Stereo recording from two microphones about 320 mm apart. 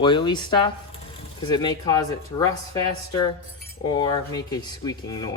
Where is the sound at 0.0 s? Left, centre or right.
Centre.